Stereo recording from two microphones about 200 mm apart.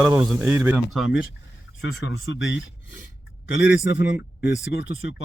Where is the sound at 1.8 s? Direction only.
65° left (ahead or behind).